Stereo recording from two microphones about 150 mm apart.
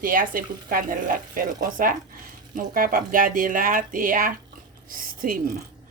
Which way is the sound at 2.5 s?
70° right (ahead or behind).